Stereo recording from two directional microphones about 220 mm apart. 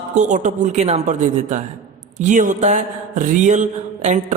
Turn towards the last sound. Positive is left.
turn(degrees=-30)  # may be behind; listen again after turning